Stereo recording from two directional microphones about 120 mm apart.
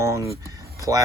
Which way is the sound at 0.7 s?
30° right (ahead or behind).